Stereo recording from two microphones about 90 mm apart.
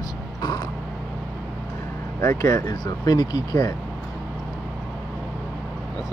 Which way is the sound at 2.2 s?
35° left (ahead or behind).